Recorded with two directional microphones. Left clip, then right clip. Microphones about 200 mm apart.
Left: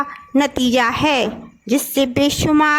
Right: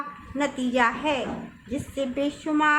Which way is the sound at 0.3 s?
50° left (ahead or behind).